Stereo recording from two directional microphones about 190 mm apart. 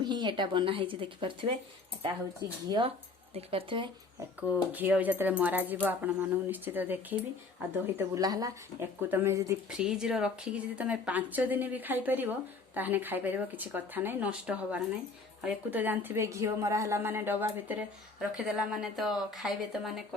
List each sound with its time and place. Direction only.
0.0 s speech: 25° right (ahead or behind)
2.6 s speech: 25° right (ahead or behind)
4.4 s a woman's voice: 10° right (ahead or behind)
9.6 s a woman's voice: 5° right (ahead or behind)